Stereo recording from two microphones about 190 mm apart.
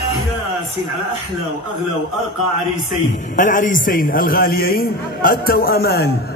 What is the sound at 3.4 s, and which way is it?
A man's voice, 45° left (ahead or behind).